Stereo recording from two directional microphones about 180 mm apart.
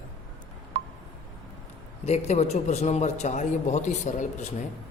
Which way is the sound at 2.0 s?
35° left (ahead or behind).